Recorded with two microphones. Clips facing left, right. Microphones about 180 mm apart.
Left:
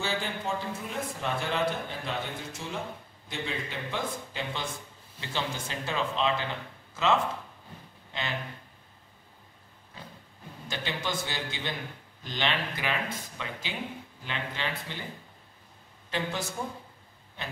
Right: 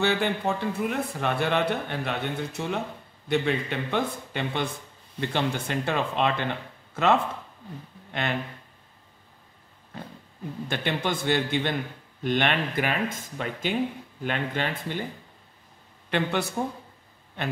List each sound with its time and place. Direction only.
0.0 s speech: 65° right (ahead or behind)
10.7 s speech: 55° right (ahead or behind)
16.1 s speech: 65° right (ahead or behind)